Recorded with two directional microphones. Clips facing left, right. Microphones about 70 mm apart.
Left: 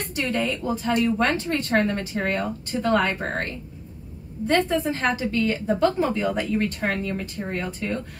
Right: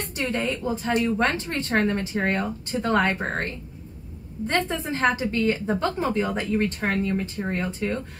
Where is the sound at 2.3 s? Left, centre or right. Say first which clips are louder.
Even; right.